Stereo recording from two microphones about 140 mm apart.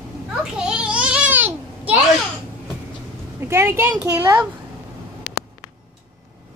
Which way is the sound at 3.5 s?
15° right (ahead or behind).